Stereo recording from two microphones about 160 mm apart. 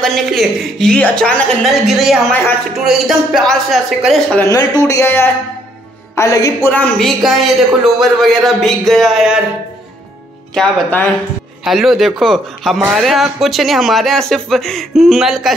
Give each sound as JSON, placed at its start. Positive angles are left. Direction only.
{"t": 0.0, "sound": "speech", "side_deg": 0}
{"t": 4.4, "sound": "speech", "side_deg": 20}
{"t": 6.7, "sound": "speech", "side_deg": 5}
{"t": 10.5, "sound": "speech", "side_deg": 5}